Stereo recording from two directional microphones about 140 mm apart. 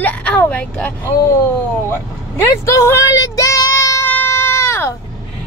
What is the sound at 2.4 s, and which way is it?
Child singing, 20° left (ahead or behind).